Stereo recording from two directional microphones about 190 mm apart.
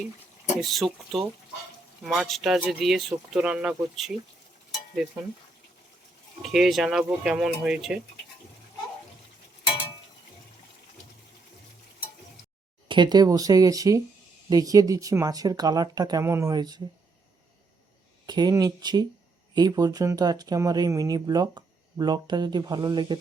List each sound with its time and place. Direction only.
0.6 s speech: centre (ahead or behind)
6.4 s speech: centre (ahead or behind)
12.9 s speech: 25° right (ahead or behind)
18.3 s speech: 20° right (ahead or behind)